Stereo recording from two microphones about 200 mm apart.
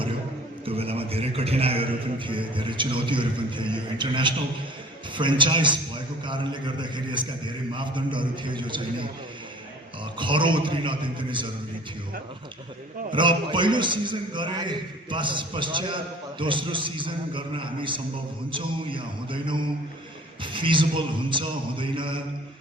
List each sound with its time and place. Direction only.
0.6 s a man's voice: 30° right (ahead or behind)
10.2 s a man's voice: 25° right (ahead or behind)
13.1 s a man's voice: 25° right (ahead or behind)